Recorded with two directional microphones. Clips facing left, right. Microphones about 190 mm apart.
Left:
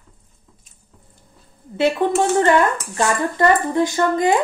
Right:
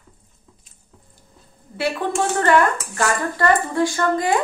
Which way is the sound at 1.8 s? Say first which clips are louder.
Left 5 dB; 20° left (ahead or behind).